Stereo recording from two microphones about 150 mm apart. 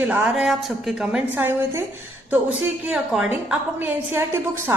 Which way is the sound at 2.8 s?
5° right (ahead or behind).